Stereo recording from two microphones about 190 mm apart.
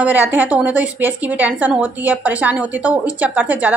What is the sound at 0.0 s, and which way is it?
A woman's voice, 10° right (ahead or behind).